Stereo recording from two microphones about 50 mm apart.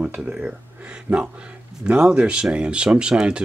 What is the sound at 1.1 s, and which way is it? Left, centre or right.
Speech, right.